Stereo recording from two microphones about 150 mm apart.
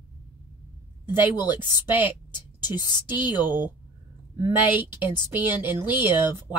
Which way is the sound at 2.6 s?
30° left (ahead or behind).